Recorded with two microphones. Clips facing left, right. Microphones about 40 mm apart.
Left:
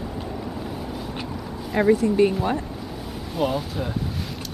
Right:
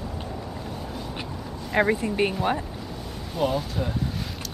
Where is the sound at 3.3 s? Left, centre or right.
Centre.